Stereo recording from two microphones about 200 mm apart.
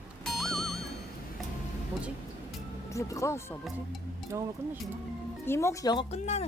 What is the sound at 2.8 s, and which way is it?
Speech, 15° left (ahead or behind).